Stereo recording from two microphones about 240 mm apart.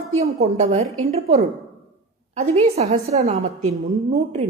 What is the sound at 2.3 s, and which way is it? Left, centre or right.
A woman's voice, right.